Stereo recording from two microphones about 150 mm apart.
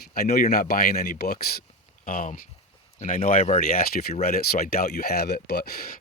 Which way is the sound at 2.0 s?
65° left (ahead or behind).